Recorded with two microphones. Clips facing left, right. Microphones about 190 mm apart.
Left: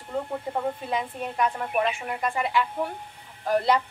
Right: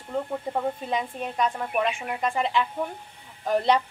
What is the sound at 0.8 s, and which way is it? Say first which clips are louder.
A woman's voice: even; 20° right (ahead or behind).